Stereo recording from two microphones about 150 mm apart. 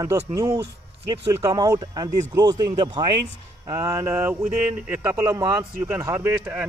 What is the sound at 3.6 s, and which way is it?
Speech, 20° right (ahead or behind).